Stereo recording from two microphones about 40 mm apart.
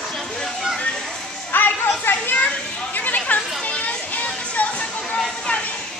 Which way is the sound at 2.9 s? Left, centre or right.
Left.